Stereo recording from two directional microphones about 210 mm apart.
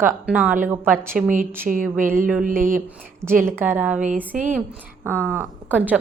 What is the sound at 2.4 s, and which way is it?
Speech, 40° right (ahead or behind).